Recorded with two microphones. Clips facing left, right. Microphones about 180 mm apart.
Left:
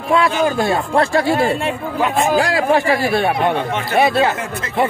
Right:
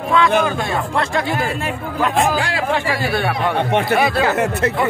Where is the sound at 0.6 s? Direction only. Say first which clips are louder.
Left 4 dB; 35° left (ahead or behind).